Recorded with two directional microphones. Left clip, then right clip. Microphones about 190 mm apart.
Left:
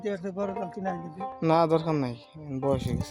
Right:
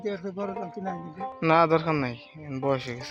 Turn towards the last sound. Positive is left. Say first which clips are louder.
# right 1 dB
turn(degrees=15)  # may be behind; listen again after turning